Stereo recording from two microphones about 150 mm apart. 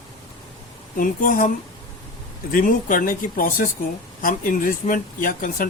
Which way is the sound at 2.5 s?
65° left (ahead or behind).